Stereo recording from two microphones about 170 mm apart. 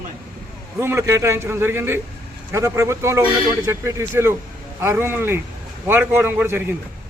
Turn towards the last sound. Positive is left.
turn(degrees=-10)  # may be behind; listen again after turning